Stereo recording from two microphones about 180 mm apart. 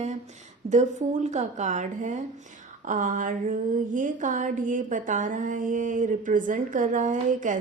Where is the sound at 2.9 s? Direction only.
45° right (ahead or behind).